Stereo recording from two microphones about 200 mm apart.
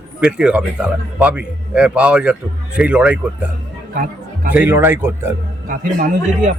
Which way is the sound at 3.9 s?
45° right (ahead or behind).